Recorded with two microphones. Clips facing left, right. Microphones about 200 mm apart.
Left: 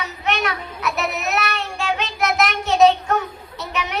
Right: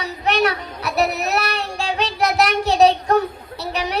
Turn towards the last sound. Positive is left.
turn(degrees=-35)  # may be behind; listen again after turning